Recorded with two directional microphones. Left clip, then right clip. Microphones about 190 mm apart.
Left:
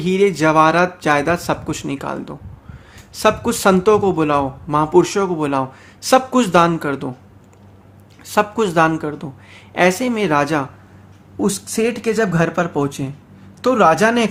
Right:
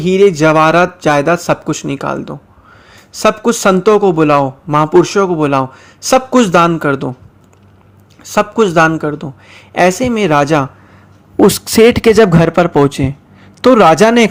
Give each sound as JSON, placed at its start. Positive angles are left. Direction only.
{"t": 0.0, "sound": "a man's voice", "side_deg": -25}
{"t": 8.2, "sound": "a man's voice", "side_deg": -25}
{"t": 11.3, "sound": "speech", "side_deg": -40}